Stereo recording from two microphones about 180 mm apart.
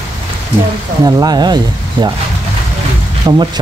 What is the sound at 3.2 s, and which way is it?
Speech, 20° right (ahead or behind).